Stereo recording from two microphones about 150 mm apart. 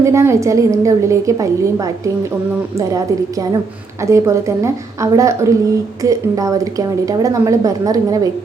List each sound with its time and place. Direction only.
0.0 s a woman's voice: 20° right (ahead or behind)
4.0 s a woman's voice: 20° right (ahead or behind)